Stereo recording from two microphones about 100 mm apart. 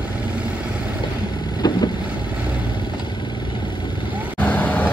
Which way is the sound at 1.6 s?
40° left (ahead or behind).